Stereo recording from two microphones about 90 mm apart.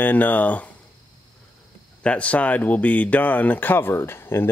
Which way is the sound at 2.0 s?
15° left (ahead or behind).